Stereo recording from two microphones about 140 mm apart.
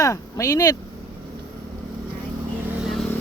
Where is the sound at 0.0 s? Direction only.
20° left (ahead or behind).